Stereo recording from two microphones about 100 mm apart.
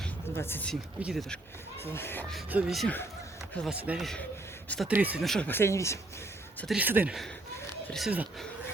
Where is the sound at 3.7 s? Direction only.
15° right (ahead or behind).